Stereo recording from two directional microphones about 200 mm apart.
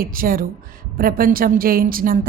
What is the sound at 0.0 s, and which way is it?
Speech, 45° right (ahead or behind).